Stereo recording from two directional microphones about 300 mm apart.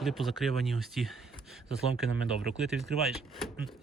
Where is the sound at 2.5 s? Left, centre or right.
Centre.